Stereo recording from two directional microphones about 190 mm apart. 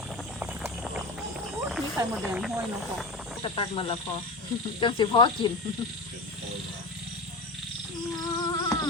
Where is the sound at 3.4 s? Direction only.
25° left (ahead or behind).